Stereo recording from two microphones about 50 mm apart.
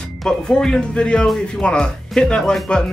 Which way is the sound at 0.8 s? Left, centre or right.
Left.